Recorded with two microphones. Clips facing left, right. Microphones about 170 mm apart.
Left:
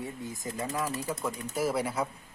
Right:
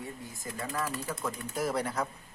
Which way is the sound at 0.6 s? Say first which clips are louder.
Left 2 dB; 15° left (ahead or behind).